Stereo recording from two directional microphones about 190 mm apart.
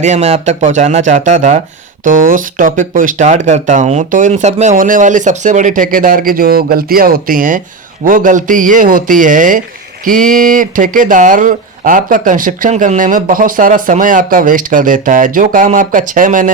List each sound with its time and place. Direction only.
0.0 s speech: 35° right (ahead or behind)